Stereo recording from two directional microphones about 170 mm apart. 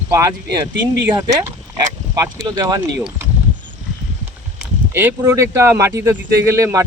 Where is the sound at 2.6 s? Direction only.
20° right (ahead or behind).